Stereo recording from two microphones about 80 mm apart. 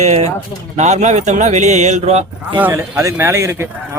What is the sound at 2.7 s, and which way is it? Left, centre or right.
Speech, right.